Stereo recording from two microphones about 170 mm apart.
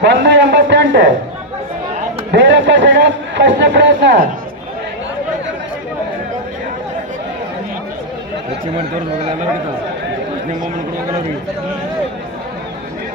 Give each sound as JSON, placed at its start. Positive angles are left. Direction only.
{"t": 0.0, "sound": "a man's voice", "side_deg": -90}
{"t": 2.3, "sound": "a man's voice", "side_deg": -90}